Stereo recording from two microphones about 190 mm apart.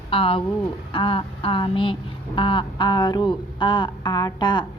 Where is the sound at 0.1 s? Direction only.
30° left (ahead or behind).